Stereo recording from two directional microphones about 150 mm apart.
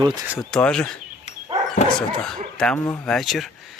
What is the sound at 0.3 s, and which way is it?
Speech, centre (ahead or behind).